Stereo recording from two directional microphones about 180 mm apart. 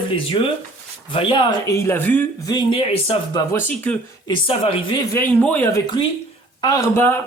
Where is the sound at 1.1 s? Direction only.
30° left (ahead or behind); by 2.5 s 10° left (ahead or behind).